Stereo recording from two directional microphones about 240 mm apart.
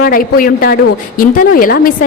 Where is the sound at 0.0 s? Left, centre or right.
Left.